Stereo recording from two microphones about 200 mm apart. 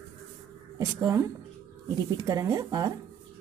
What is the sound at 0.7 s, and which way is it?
Speech, 15° right (ahead or behind).